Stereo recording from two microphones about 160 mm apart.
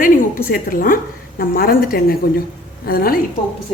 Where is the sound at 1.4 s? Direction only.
65° left (ahead or behind).